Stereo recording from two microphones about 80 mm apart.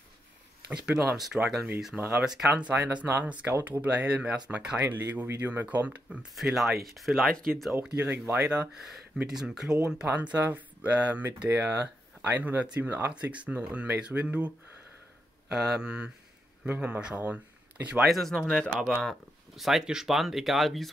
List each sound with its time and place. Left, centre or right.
0.8 s speech: centre
2.0 s speech: right
2.2 s speech: centre
2.5 s speech: centre
4.9 s speech: right
6.3 s speech: centre
8.0 s speech: centre
8.8 s speech: centre
10.0 s speech: right
15.5 s speech: centre
18.0 s speech: centre
19.5 s speech: centre